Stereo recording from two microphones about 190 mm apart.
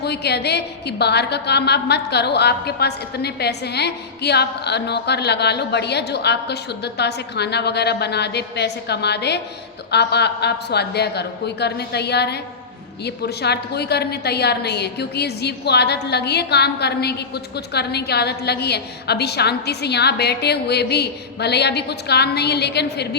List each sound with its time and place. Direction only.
0.0 s a woman's voice: 60° left (ahead or behind)